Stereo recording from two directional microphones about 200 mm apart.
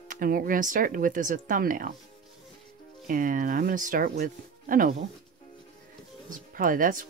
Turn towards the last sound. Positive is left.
turn(degrees=-40)  # may be behind; listen again after turning